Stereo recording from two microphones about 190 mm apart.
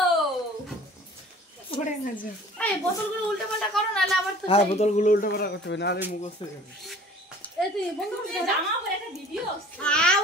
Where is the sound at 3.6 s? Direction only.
Centre (ahead or behind).